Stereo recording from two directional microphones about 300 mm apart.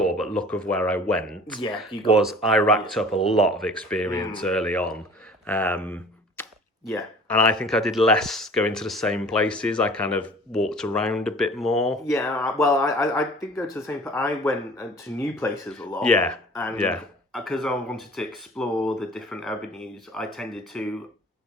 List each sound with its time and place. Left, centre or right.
0.0 s speech: centre
2.1 s speech: centre